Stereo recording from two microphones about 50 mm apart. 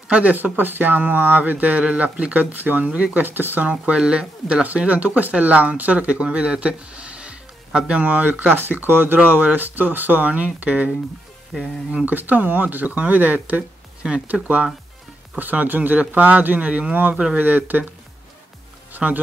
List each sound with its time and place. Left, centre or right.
0.1 s speech: right
2.3 s speech: right
3.3 s speech: right
3.9 s speech: centre
11.9 s speech: right
12.2 s speech: right
17.1 s speech: right
17.4 s speech: right
18.9 s speech: right